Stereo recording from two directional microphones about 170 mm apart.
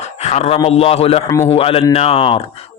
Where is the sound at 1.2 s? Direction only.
20° left (ahead or behind).